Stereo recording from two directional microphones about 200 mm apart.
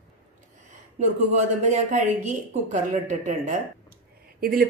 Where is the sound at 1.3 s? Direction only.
35° right (ahead or behind).